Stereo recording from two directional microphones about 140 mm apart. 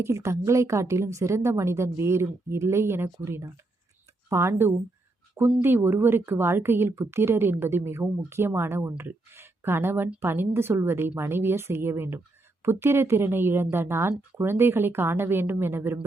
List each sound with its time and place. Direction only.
0.0 s a woman's voice: 20° right (ahead or behind)